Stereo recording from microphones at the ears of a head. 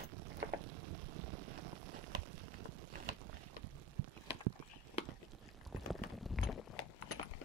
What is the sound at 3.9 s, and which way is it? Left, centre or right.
Clip-clop, right.